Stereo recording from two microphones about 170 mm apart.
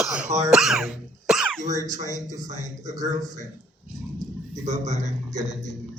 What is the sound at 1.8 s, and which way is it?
A man's voice, 50° right (ahead or behind).